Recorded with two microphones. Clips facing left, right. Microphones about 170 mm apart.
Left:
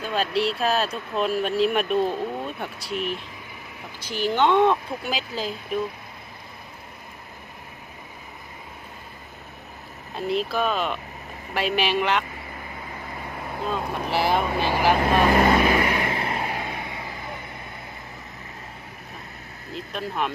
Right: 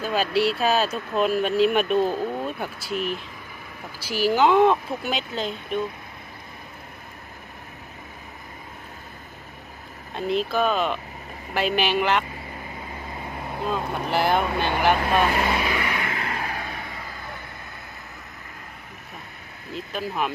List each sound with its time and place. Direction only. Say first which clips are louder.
0.0 s speech: right 2 dB; 5° right (ahead or behind)
10.2 s speech: right 1 dB; centre (ahead or behind)
13.7 s speech: right 1 dB; centre (ahead or behind)
15.4 s vehicle: left 6 dB; 45° left (ahead or behind); by 17.3 s 20° left (ahead or behind)
19.7 s speech: right 1 dB; centre (ahead or behind)